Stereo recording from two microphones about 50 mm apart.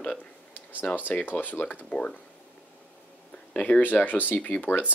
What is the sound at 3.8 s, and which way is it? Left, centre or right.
Speech, left.